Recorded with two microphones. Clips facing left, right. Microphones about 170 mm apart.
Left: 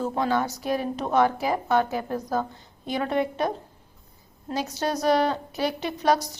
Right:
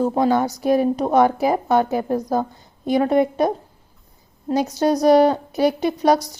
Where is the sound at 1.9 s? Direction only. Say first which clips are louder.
Right 8 dB; 20° right (ahead or behind).